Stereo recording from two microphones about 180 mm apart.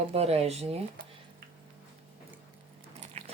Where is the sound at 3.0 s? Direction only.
40° right (ahead or behind).